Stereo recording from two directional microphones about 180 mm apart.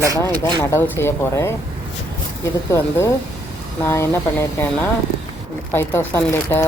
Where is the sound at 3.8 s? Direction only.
15° left (ahead or behind).